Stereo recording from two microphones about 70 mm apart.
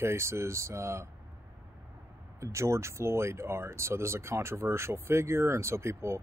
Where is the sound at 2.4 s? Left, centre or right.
Right.